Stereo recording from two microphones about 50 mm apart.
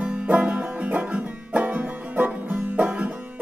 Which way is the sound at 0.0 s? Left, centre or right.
Right.